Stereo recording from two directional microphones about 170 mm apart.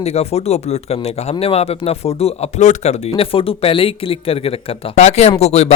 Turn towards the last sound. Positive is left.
turn(degrees=40)  # may be behind; listen again after turning